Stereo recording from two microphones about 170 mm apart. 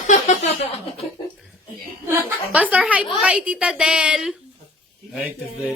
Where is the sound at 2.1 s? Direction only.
10° right (ahead or behind).